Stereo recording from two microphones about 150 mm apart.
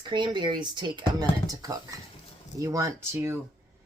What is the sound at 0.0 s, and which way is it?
Speech, 30° right (ahead or behind).